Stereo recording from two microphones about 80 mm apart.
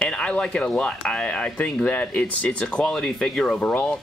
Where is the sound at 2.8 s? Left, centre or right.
Centre.